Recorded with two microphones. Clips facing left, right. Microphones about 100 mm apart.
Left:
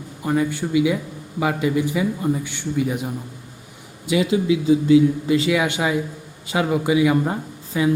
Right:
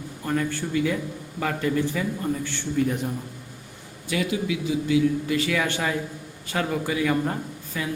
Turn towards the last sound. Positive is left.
turn(degrees=20)  # may be behind; listen again after turning